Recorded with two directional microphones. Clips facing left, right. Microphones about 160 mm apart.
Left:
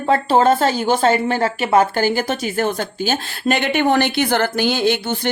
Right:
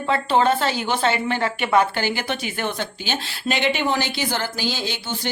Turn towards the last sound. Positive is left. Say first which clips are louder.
# left 9 dB
turn(degrees=55)  # may be behind; listen again after turning